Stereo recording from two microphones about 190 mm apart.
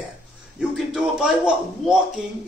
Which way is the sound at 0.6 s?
5° right (ahead or behind).